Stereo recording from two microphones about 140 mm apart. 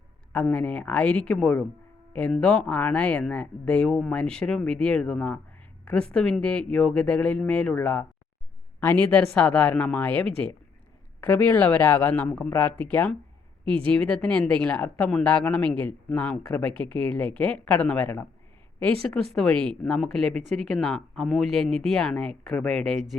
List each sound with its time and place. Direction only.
0.4 s speech: 10° left (ahead or behind)